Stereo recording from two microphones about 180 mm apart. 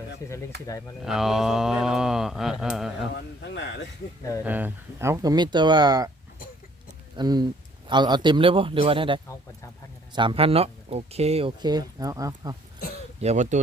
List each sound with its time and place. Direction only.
0.2 s speech: 20° left (ahead or behind)
1.0 s mantra: centre (ahead or behind)
3.2 s a sound: 75° left (ahead or behind)
4.4 s speech: 10° right (ahead or behind)
7.2 s speech: 25° right (ahead or behind)
13.1 s speech: 40° right (ahead or behind)